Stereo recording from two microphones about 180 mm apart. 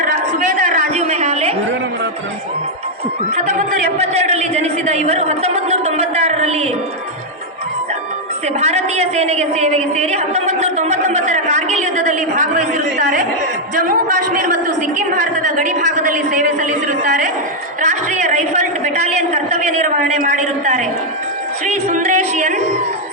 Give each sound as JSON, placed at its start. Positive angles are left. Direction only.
{"t": 0.1, "sound": "a sound", "side_deg": -45}
{"t": 3.5, "sound": "a man's voice", "side_deg": -35}
{"t": 8.6, "sound": "a woman's voice", "side_deg": -35}
{"t": 21.7, "sound": "music", "side_deg": -40}